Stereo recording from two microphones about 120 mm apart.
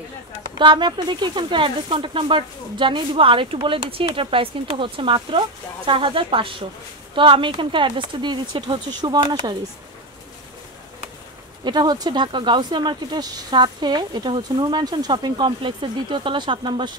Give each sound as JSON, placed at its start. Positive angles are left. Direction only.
{"t": 0.6, "sound": "speech", "side_deg": -40}
{"t": 11.6, "sound": "speech", "side_deg": -35}